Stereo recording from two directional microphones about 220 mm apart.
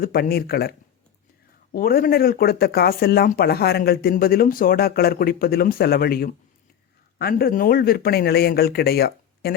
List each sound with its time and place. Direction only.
0.0 s speech: 45° left (ahead or behind)